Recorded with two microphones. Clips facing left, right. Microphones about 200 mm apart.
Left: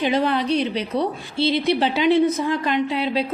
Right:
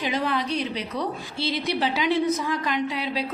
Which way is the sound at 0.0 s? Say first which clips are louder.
Left 6 dB; 30° left (ahead or behind).